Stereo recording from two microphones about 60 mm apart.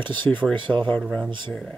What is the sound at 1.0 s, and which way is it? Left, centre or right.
Speech, centre.